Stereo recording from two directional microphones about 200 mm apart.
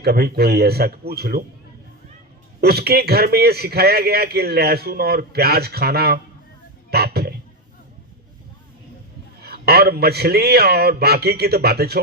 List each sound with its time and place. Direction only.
0.0 s a man's voice: 50° right (ahead or behind)
2.6 s a man's voice: 50° right (ahead or behind)
6.9 s a sound: 50° right (ahead or behind)
9.4 s a man's voice: 50° right (ahead or behind)